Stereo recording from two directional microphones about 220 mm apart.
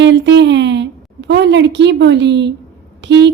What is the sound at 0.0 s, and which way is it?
A woman's voice, 55° right (ahead or behind).